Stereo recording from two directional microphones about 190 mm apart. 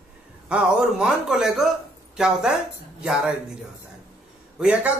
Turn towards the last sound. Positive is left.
turn(degrees=-5)  # may be behind; listen again after turning